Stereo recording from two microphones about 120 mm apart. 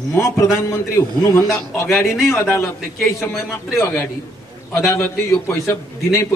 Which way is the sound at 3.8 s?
15° left (ahead or behind).